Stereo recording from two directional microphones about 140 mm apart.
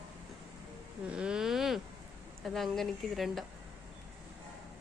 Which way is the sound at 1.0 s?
5° right (ahead or behind).